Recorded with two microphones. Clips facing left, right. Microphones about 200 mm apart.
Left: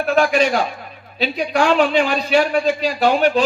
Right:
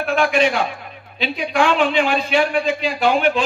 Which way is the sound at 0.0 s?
40° left (ahead or behind).